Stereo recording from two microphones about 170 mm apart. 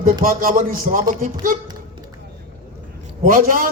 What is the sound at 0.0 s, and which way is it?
Speech, 55° right (ahead or behind).